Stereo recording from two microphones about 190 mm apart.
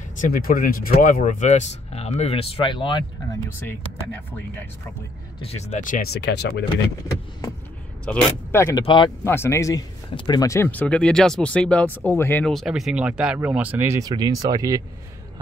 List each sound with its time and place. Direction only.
0.2 s speech: 50° left (ahead or behind); by 3.0 s 25° left (ahead or behind)
3.5 s speech: 10° left (ahead or behind)
5.4 s speech: 35° left (ahead or behind); by 6.6 s 65° left (ahead or behind)
8.0 s speech: 5° left (ahead or behind)
8.8 s speech: 25° left (ahead or behind)
9.2 s speech: 15° left (ahead or behind); by 14.8 s 20° right (ahead or behind)